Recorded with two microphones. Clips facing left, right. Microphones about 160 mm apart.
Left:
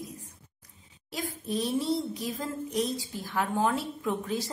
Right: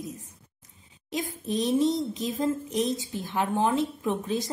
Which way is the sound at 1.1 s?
20° right (ahead or behind).